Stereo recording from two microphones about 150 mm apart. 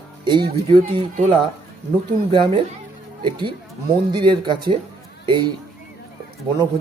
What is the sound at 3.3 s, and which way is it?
Speech, 30° right (ahead or behind).